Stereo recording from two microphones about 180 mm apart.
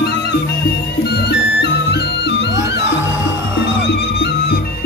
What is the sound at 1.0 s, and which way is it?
Music, 65° left (ahead or behind).